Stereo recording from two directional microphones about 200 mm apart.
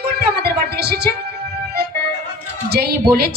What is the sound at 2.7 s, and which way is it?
Speech, 50° right (ahead or behind).